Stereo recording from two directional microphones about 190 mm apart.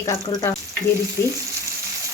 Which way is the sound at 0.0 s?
15° left (ahead or behind).